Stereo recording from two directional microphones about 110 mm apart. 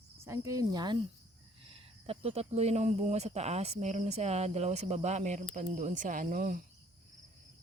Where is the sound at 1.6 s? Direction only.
55° right (ahead or behind); by 5.4 s 90° right.